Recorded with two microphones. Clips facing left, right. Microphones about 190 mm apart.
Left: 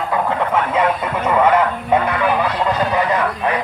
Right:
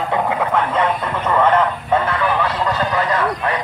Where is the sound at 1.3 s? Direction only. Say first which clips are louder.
Left 1 dB; 10° left (ahead or behind).